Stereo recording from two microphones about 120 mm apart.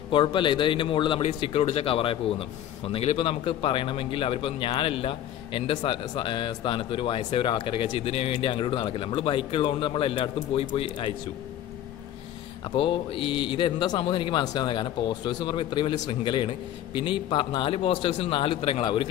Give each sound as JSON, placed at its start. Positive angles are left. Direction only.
{"t": 0.1, "sound": "speech", "side_deg": 45}
{"t": 12.7, "sound": "speech", "side_deg": 50}